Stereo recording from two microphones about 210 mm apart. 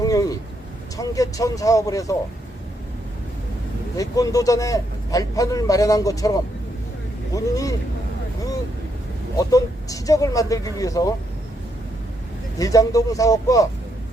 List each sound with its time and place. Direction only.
0.0 s speech: 15° left (ahead or behind)
3.9 s speech: 15° left (ahead or behind)
7.3 s speech: 15° left (ahead or behind)
9.4 s speech: 15° left (ahead or behind)
12.5 s speech: 15° left (ahead or behind)